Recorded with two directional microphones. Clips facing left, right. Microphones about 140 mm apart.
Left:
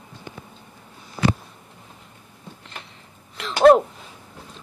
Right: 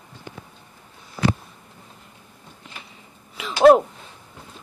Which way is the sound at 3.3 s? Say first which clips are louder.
Even; 5° right (ahead or behind).